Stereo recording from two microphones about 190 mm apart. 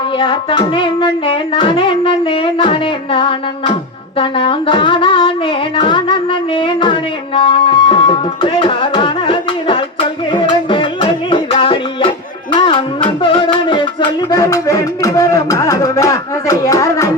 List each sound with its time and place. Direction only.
0.2 s music: 25° left (ahead or behind)
14.3 s speech: 20° left (ahead or behind)